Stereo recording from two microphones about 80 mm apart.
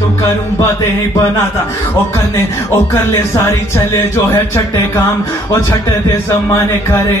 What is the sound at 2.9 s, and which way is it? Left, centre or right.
Speech, left.